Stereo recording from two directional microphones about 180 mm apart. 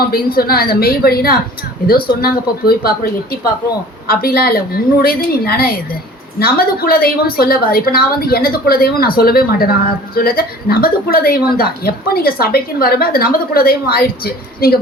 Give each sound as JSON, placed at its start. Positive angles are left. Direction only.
{"t": 0.0, "sound": "a woman's voice", "side_deg": 55}
{"t": 4.1, "sound": "a woman's voice", "side_deg": 55}